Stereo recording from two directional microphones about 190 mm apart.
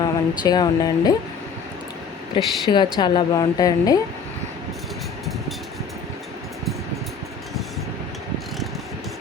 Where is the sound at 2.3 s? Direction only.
25° left (ahead or behind).